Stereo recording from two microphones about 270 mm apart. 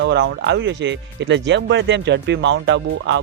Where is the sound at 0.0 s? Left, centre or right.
Right.